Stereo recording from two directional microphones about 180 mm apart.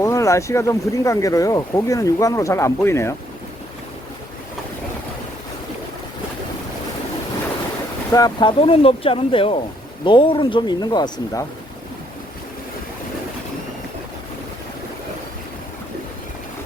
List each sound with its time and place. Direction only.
0.0 s speech: 15° left (ahead or behind)
8.1 s speech: 25° left (ahead or behind)